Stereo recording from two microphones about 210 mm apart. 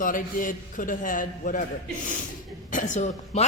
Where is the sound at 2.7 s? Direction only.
35° left (ahead or behind).